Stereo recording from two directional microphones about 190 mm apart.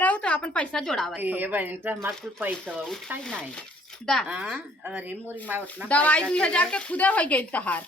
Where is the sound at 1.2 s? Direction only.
10° right (ahead or behind).